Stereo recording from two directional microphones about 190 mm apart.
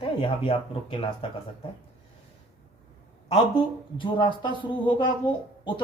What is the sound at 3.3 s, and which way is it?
Speech, 25° left (ahead or behind).